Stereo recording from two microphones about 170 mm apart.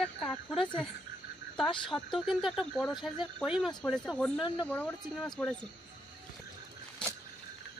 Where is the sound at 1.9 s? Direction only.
Centre (ahead or behind).